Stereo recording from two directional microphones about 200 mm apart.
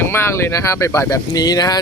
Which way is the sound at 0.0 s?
10° left (ahead or behind).